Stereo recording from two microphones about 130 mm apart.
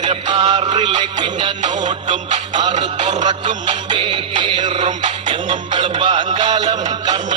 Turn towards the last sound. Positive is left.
turn(degrees=-35)  # may be behind; listen again after turning